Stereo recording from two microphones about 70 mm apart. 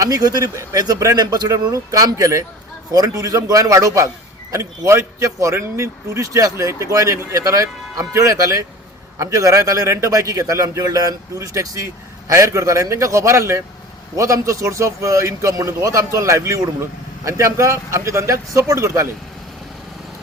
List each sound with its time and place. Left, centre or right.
0.0 s speech: right
1.1 s speech: right
1.5 s a man's voice: right
2.9 s speech: right
3.2 s a man's voice: right